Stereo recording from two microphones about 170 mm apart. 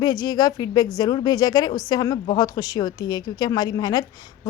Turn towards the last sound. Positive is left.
turn(degrees=25)  # may be behind; listen again after turning